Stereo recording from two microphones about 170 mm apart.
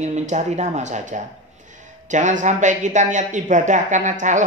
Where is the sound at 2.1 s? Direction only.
45° right (ahead or behind).